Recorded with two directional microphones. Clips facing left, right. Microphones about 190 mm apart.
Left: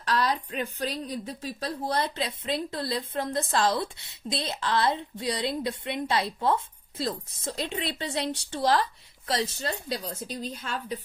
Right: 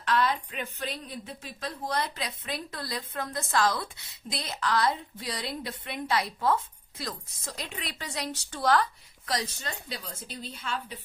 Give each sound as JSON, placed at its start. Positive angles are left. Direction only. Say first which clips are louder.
{"t": 0.0, "sound": "a woman's voice", "louder": "even", "side_deg": 35}